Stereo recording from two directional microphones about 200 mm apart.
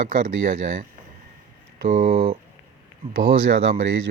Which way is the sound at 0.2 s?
40° right (ahead or behind).